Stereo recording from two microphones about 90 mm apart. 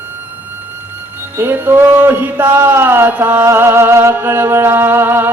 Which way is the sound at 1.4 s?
20° right (ahead or behind).